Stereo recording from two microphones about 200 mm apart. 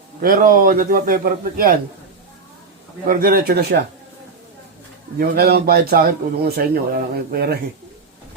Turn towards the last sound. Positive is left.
turn(degrees=-50)  # may be behind; listen again after turning